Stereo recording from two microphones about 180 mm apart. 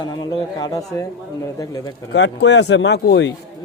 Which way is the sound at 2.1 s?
75° left (ahead or behind).